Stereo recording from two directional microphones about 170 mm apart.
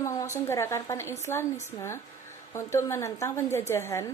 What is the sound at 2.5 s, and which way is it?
A woman's voice, 15° left (ahead or behind).